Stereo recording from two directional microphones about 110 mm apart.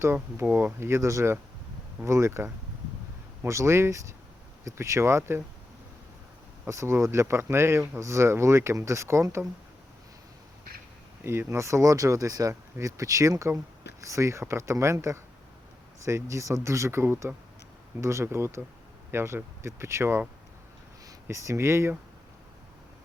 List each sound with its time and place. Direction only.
0.0 s speech: 20° right (ahead or behind)
6.7 s speech: 25° right (ahead or behind)
11.2 s speech: 20° right (ahead or behind)
21.2 s speech: 25° right (ahead or behind)